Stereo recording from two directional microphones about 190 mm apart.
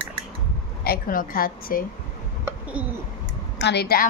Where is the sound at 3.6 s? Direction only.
60° left (ahead or behind).